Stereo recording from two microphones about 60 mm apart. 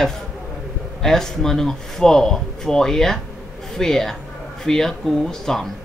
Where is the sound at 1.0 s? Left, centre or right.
Centre.